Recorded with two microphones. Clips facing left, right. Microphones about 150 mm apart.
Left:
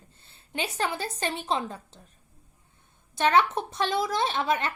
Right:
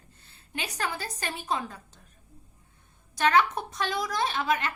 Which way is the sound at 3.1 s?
25° left (ahead or behind).